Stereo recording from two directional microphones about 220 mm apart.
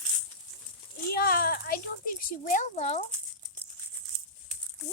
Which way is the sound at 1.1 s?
40° left (ahead or behind).